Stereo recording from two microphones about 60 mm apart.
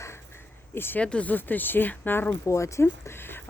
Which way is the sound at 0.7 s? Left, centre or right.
Left.